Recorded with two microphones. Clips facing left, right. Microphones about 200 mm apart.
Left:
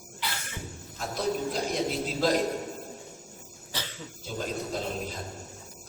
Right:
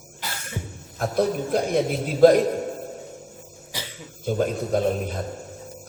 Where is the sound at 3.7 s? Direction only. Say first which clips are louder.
Right 2 dB; 10° right (ahead or behind).